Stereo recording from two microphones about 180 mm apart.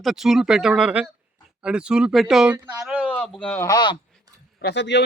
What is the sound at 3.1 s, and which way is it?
Speech, 5° left (ahead or behind).